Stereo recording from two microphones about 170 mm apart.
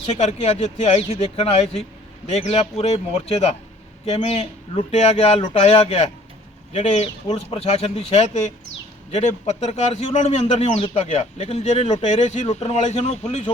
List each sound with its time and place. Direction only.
0.2 s a man's voice: 40° left (ahead or behind)
4.0 s a man's voice: 40° left (ahead or behind)